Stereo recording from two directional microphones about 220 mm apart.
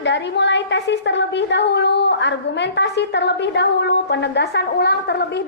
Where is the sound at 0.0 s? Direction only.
55° left (ahead or behind).